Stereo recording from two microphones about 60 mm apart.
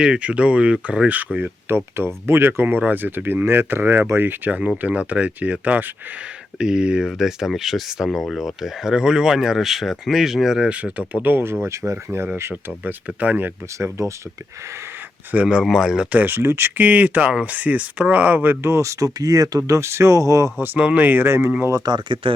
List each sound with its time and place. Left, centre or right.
0.0 s speech: centre
1.6 s speech: right
6.6 s speech: centre
10.7 s speech: right
11.6 s speech: right
12.8 s speech: right
14.0 s speech: right
15.6 s speech: centre
16.1 s speech: right
16.8 s speech: right
18.6 s speech: right
20.6 s speech: right